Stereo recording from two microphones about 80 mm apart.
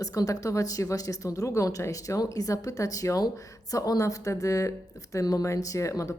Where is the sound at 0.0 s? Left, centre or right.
Left.